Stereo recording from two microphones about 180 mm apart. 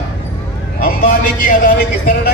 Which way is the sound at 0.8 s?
50° left (ahead or behind).